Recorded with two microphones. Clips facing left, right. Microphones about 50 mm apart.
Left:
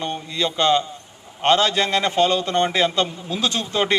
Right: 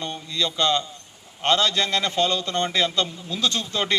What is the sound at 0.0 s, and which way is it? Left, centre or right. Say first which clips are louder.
A man's voice: left 3 dB; left.